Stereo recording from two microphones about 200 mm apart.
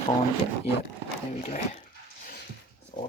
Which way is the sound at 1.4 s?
40° left (ahead or behind).